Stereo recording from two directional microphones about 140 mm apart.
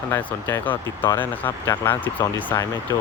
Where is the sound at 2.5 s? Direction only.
25° left (ahead or behind).